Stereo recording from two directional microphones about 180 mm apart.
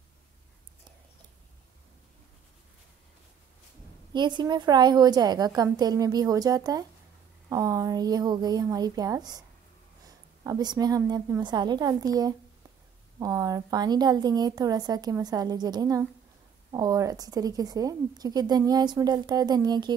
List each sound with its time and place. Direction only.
4.1 s a woman's voice: 25° right (ahead or behind)
10.4 s a woman's voice: 20° right (ahead or behind)